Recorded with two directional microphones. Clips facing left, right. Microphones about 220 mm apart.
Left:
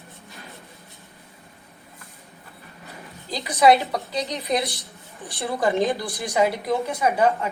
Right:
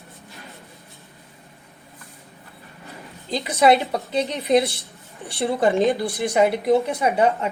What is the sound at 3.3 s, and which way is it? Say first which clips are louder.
A woman's voice: right 1 dB; 25° right (ahead or behind).